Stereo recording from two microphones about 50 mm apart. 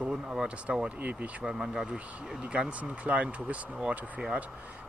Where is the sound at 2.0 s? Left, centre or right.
Right.